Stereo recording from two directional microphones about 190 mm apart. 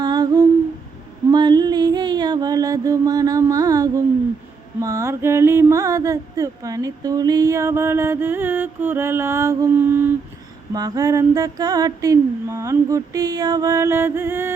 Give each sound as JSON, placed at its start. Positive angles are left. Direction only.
{"t": 0.0, "sound": "humming", "side_deg": -20}
{"t": 1.3, "sound": "music", "side_deg": -20}
{"t": 4.8, "sound": "a sound", "side_deg": -15}